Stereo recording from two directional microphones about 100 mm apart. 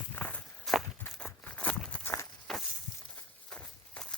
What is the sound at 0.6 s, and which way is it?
Walk, centre (ahead or behind).